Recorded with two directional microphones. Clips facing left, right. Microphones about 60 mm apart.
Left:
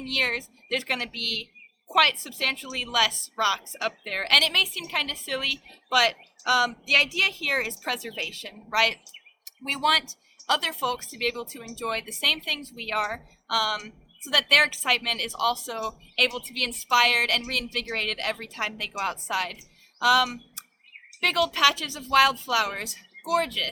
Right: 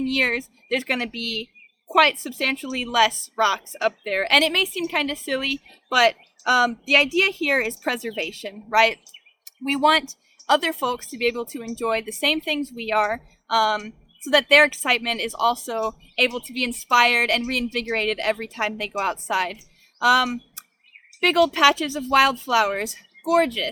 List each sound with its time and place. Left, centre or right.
0.1 s speech: right